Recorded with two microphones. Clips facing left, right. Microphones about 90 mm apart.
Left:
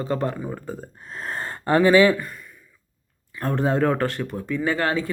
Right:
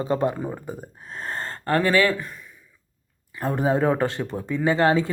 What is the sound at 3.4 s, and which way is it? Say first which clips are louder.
Speech: even; 10° right (ahead or behind).